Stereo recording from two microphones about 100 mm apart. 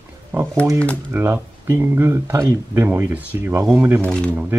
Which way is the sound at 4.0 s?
10° left (ahead or behind).